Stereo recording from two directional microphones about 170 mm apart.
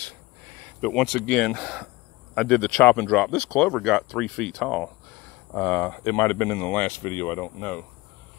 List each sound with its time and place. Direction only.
0.7 s speech: centre (ahead or behind)